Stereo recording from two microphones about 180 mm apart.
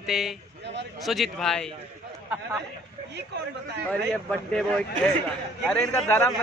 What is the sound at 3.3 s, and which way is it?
Speech, 65° right (ahead or behind).